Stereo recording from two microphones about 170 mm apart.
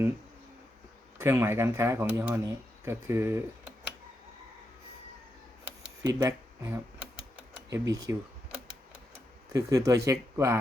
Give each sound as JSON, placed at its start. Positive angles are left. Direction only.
{"t": 1.2, "sound": "speech", "side_deg": -15}
{"t": 5.6, "sound": "a sound", "side_deg": -20}
{"t": 7.7, "sound": "speech", "side_deg": -20}
{"t": 9.5, "sound": "speech", "side_deg": -20}